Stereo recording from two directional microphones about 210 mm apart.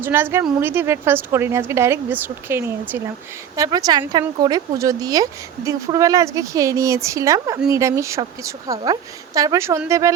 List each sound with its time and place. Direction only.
0.0 s speech: 10° right (ahead or behind)